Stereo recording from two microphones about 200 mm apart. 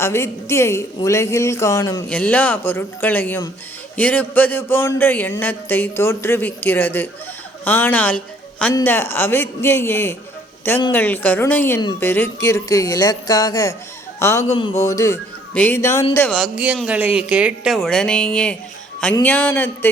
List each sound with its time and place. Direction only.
0.0 s a woman's voice: 15° left (ahead or behind)
14.4 s a sound: 30° left (ahead or behind)
14.8 s speech: 15° left (ahead or behind)